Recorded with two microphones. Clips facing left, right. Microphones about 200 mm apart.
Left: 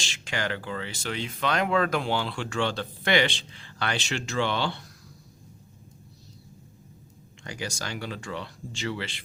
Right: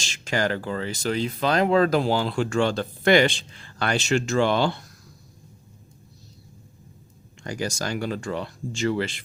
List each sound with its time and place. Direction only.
0.0 s speech: 40° right (ahead or behind)
7.4 s speech: 45° right (ahead or behind)